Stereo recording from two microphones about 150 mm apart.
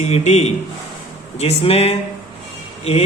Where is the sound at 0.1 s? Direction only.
45° left (ahead or behind).